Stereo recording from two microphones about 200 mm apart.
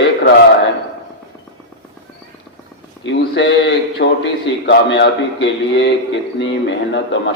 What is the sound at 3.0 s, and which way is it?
A man's voice, 65° left (ahead or behind).